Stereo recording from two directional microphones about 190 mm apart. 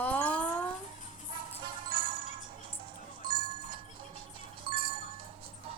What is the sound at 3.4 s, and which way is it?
Music, 25° right (ahead or behind).